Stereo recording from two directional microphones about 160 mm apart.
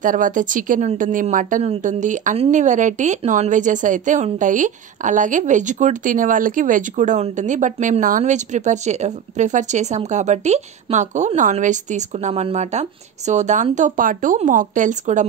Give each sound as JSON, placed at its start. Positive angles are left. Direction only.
{"t": 0.0, "sound": "a woman's voice", "side_deg": -55}